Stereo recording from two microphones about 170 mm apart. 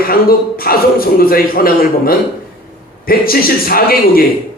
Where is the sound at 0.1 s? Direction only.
60° left (ahead or behind).